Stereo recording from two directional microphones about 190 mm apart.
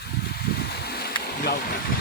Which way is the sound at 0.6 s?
55° left (ahead or behind).